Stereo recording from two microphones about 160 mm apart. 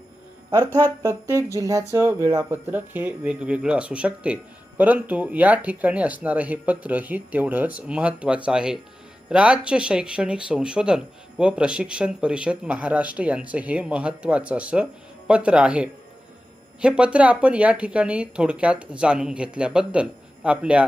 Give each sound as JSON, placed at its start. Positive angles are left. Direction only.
{"t": 0.5, "sound": "speech", "side_deg": -15}